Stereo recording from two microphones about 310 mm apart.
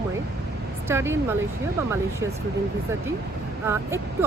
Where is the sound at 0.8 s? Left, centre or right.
Centre.